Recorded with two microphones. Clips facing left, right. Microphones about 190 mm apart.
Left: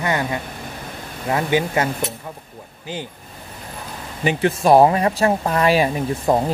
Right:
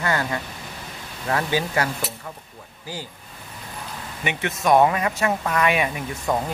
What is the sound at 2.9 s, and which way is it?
Speech, 20° left (ahead or behind).